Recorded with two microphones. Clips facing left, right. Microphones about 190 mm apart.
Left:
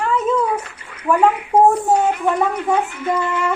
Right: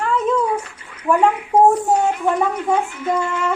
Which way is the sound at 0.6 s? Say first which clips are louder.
Left 2 dB; 70° left (ahead or behind).